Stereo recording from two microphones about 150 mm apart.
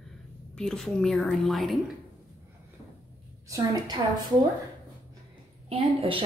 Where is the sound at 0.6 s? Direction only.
5° left (ahead or behind).